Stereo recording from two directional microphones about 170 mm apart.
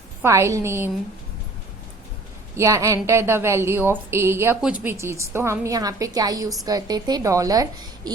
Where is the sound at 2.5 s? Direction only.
15° right (ahead or behind).